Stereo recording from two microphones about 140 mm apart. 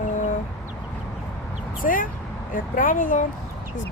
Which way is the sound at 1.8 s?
75° left (ahead or behind).